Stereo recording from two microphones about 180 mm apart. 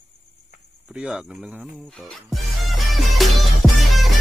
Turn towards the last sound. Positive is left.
turn(degrees=0)  # may be behind; listen again after turning